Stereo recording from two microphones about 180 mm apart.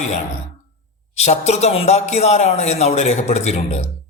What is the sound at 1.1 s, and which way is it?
Speech, 35° left (ahead or behind).